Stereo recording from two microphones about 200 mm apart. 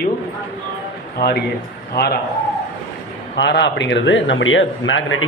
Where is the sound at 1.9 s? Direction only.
50° left (ahead or behind).